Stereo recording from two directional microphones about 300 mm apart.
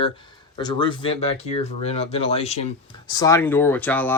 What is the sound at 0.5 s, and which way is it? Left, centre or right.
Speech, centre.